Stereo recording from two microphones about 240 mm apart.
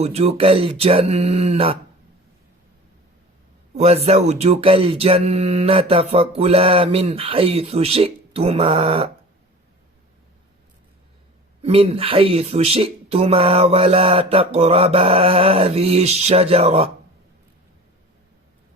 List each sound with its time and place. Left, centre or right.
0.0 s speech: right
3.8 s speech: right
11.6 s speech: right